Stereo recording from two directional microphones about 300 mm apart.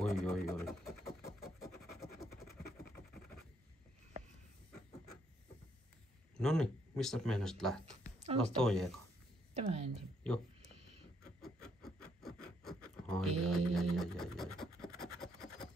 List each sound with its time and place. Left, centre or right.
0.0 s a sound: centre
6.3 s speech: centre
8.2 s speech: right
8.5 s speech: centre
9.5 s speech: right
11.4 s a sound: centre
13.9 s scratch: centre